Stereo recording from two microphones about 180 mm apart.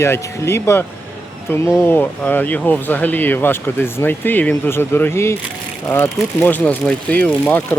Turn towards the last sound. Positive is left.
turn(degrees=10)  # may be behind; listen again after turning